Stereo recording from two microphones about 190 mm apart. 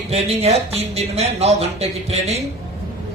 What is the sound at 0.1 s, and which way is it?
A man's voice, 35° right (ahead or behind).